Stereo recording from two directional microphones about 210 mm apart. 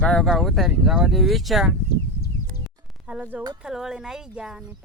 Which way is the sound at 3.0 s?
5° right (ahead or behind).